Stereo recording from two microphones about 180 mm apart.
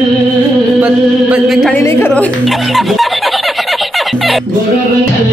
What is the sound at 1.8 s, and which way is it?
Music, 15° left (ahead or behind).